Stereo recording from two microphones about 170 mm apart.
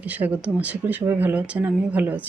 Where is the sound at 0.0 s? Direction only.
10° right (ahead or behind).